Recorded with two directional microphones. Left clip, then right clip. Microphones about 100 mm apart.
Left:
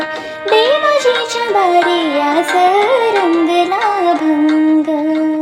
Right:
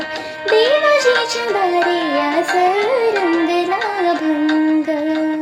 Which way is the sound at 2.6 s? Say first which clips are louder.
Left 5 dB; 55° left (ahead or behind).